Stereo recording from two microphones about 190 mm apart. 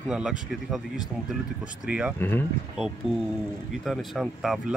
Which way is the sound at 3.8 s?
Centre (ahead or behind).